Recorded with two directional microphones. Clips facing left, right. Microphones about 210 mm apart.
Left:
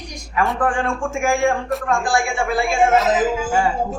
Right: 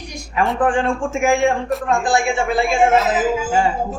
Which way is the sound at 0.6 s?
20° right (ahead or behind).